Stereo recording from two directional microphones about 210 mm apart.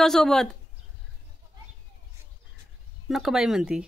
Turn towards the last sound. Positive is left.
turn(degrees=-5)  # may be behind; listen again after turning